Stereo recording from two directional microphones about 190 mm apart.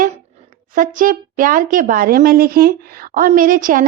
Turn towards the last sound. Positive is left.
turn(degrees=-45)  # may be behind; listen again after turning